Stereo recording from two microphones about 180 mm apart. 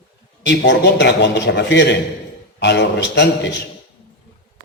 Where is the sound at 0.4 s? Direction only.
75° left (ahead or behind).